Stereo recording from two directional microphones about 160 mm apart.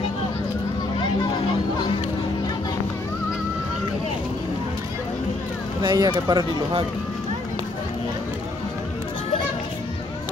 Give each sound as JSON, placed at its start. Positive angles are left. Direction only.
{"t": 5.8, "sound": "speech", "side_deg": -25}